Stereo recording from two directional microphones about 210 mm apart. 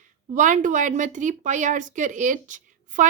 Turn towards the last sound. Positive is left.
turn(degrees=-35)  # may be behind; listen again after turning